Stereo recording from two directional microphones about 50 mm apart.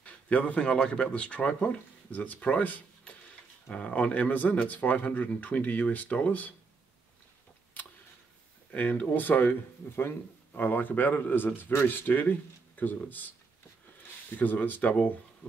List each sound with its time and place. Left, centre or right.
0.0 s speech: left
8.7 s speech: left
14.3 s speech: left